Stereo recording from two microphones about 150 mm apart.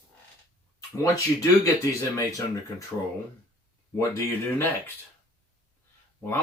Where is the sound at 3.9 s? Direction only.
20° left (ahead or behind).